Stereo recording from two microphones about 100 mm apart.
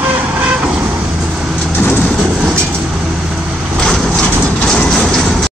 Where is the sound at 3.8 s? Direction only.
5° left (ahead or behind).